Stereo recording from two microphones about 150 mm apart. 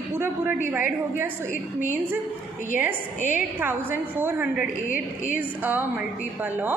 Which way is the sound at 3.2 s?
15° right (ahead or behind).